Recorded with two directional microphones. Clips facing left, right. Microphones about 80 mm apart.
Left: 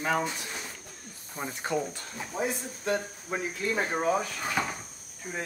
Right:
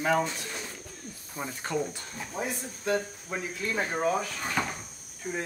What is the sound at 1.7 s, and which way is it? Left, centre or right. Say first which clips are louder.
Speech: even; centre.